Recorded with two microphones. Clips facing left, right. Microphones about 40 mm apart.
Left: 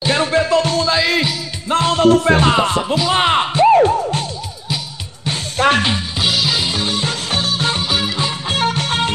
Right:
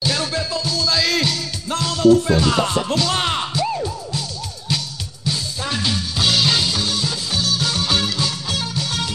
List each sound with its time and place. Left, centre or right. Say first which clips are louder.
0.0 s music: left 7 dB; left
0.5 s music: left 9 dB; left
0.7 s music: left 4 dB; left
1.8 s music: left 2 dB; left
2.5 s speech: left 3 dB; left
3.2 s music: left 8 dB; left
5.6 s music: left 16 dB; left
5.9 s music: left 3 dB; left
6.2 s music: even; centre
6.6 s music: left 2 dB; left
7.1 s music: left 3 dB; left
7.8 s music: left 1 dB; centre
8.2 s music: left 4 dB; left
8.6 s music: left 7 dB; left